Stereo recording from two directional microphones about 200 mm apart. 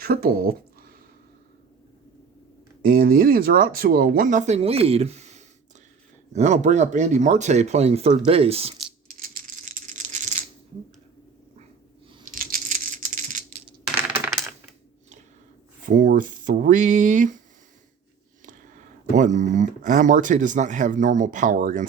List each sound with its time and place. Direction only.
0.0 s speech: 45° right (ahead or behind)
2.8 s speech: 45° right (ahead or behind); by 8.7 s 30° right (ahead or behind)
9.1 s a sound: 45° right (ahead or behind)
12.2 s coin: 45° right (ahead or behind)
15.9 s speech: 40° right (ahead or behind)
18.4 s speech: 40° right (ahead or behind)